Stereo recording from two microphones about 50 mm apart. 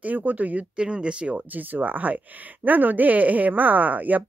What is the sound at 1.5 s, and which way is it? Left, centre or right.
Speech, right.